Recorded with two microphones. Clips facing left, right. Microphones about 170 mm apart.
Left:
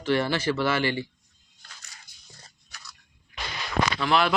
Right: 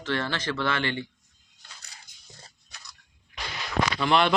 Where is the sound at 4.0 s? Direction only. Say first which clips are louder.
Right 2 dB; centre (ahead or behind).